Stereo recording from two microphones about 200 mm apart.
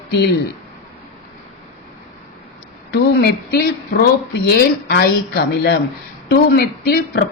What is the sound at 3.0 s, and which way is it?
A woman's voice, 50° left (ahead or behind).